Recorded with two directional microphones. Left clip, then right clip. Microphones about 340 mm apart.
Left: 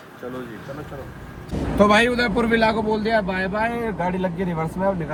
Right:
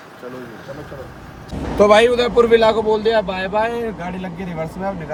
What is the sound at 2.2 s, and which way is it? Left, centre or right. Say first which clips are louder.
Speech: right 7 dB; centre.